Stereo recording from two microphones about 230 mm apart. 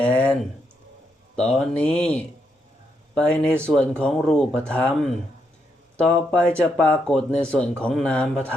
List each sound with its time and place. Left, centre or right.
0.0 s speech: centre